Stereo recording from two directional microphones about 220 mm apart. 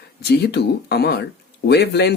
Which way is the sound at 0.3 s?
45° left (ahead or behind).